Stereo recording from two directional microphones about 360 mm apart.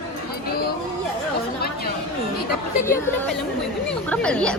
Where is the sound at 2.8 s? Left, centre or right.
Centre.